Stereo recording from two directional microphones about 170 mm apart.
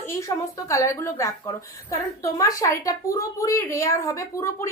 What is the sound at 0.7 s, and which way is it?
Speech, 15° left (ahead or behind).